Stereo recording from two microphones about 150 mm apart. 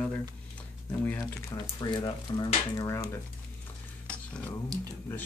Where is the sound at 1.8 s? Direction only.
30° left (ahead or behind).